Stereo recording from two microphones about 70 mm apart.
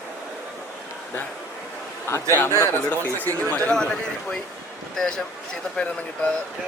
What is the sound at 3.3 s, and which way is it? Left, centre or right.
Speech, centre.